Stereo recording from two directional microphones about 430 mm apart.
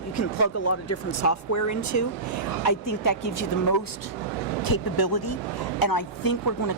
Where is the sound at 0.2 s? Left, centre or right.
Left.